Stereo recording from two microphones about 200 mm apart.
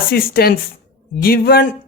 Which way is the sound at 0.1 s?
50° left (ahead or behind).